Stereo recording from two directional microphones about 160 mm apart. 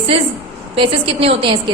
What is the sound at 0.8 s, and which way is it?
Speech, 35° right (ahead or behind).